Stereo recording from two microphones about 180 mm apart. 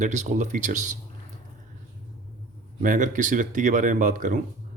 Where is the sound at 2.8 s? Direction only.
45° right (ahead or behind).